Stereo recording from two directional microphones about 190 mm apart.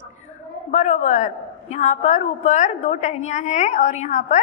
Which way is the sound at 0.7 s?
40° left (ahead or behind).